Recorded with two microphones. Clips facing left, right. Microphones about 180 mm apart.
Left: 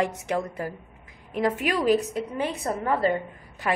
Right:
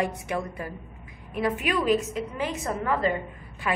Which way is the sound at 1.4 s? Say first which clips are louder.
Left 2 dB; 35° left (ahead or behind).